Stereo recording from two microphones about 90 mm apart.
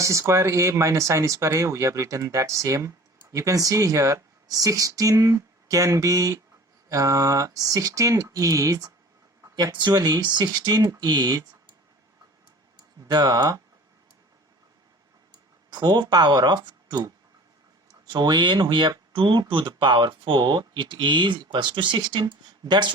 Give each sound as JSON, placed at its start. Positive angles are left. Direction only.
{"t": 0.0, "sound": "speech", "side_deg": -35}
{"t": 9.7, "sound": "speech", "side_deg": -55}
{"t": 13.1, "sound": "speech", "side_deg": -45}
{"t": 15.7, "sound": "speech", "side_deg": -50}